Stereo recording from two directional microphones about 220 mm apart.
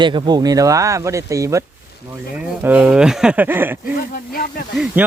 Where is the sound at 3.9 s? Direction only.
40° left (ahead or behind).